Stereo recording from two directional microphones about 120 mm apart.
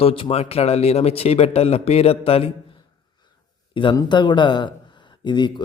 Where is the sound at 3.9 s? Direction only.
40° left (ahead or behind).